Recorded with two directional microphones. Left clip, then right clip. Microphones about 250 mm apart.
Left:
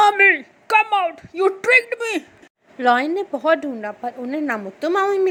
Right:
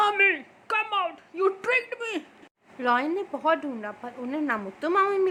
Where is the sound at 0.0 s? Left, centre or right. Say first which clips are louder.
Left 8 dB; centre.